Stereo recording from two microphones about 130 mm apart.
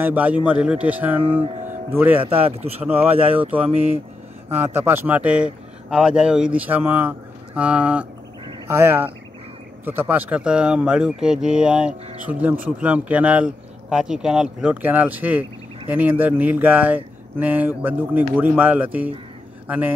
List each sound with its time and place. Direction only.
0.0 s speech: 10° right (ahead or behind)
2.2 s speech: 45° right (ahead or behind)
2.8 s speech: 15° right (ahead or behind)